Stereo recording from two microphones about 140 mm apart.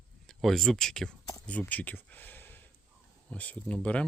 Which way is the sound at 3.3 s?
10° left (ahead or behind).